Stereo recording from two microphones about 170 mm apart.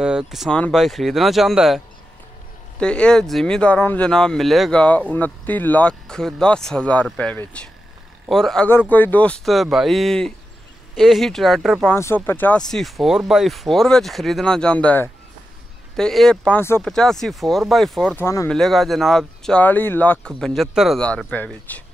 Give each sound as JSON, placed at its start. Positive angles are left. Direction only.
{"t": 0.0, "sound": "speech", "side_deg": -5}
{"t": 2.8, "sound": "speech", "side_deg": 5}
{"t": 11.9, "sound": "speech", "side_deg": 15}
{"t": 18.1, "sound": "speech", "side_deg": 15}
{"t": 18.5, "sound": "speech", "side_deg": 0}